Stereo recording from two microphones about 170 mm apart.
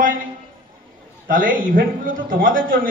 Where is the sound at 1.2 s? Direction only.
55° right (ahead or behind).